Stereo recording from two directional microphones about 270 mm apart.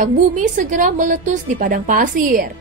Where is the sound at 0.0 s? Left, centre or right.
Right.